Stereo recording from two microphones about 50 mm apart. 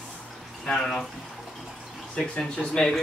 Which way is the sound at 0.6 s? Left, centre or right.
Centre.